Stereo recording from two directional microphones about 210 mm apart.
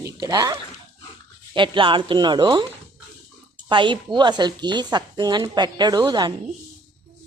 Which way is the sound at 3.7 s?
25° right (ahead or behind).